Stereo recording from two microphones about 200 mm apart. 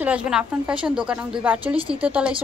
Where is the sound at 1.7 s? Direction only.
25° right (ahead or behind).